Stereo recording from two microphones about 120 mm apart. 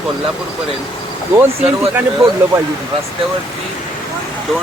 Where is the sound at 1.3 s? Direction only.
15° right (ahead or behind).